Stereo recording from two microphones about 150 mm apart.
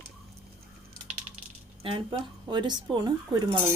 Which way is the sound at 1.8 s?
35° right (ahead or behind).